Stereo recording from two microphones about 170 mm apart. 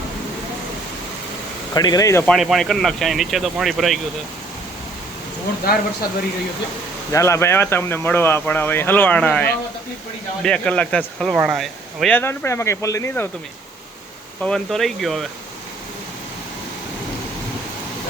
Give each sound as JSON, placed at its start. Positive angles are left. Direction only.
{"t": 1.7, "sound": "speech", "side_deg": 20}
{"t": 2.2, "sound": "speech", "side_deg": 0}
{"t": 7.1, "sound": "speech", "side_deg": 15}
{"t": 14.4, "sound": "speech", "side_deg": 5}